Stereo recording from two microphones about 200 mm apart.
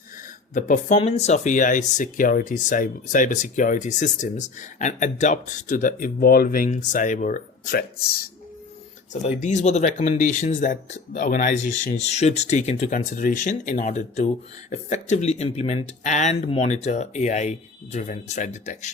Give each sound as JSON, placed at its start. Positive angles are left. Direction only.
{"t": 0.5, "sound": "speech", "side_deg": 40}
{"t": 9.4, "sound": "speech", "side_deg": 35}